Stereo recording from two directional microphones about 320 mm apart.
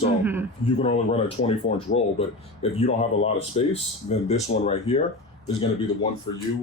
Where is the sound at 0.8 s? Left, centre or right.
Centre.